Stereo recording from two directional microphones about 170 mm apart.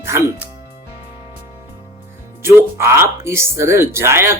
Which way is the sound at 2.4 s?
15° right (ahead or behind).